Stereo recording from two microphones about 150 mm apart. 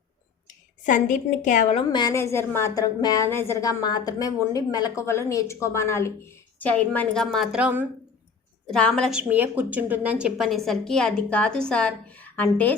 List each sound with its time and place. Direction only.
0.9 s a woman's voice: 60° left (ahead or behind)
1.7 s a woman's voice: 30° left (ahead or behind)
2.1 s a woman's voice: 15° left (ahead or behind); by 7.9 s 10° right (ahead or behind)
8.7 s a woman's voice: 5° left (ahead or behind)
9.2 s a woman's voice: 10° right (ahead or behind); by 12.7 s 10° left (ahead or behind)